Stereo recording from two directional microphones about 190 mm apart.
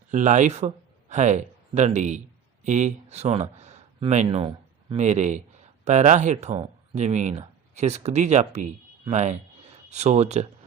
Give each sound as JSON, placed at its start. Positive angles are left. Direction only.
{"t": 0.1, "sound": "speech", "side_deg": -40}